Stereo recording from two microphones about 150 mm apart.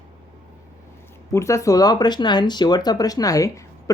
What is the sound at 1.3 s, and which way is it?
Speech, 20° left (ahead or behind).